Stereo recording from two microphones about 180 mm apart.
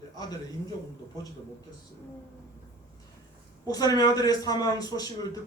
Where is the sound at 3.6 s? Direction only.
20° left (ahead or behind).